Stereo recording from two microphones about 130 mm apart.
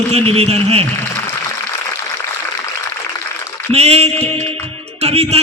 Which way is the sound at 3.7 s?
50° right (ahead or behind).